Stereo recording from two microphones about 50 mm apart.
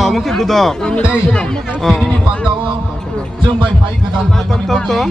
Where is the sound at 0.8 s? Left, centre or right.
Centre.